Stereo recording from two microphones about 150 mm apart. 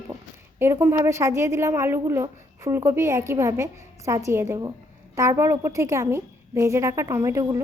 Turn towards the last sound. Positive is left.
turn(degrees=-20)  # may be behind; listen again after turning